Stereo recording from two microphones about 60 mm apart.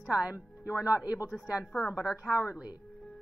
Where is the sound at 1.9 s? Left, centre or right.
Centre.